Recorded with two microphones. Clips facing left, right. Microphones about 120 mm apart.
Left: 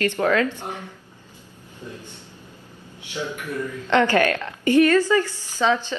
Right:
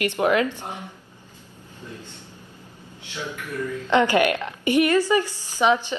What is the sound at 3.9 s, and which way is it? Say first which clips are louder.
A woman's voice: even; 15° right (ahead or behind).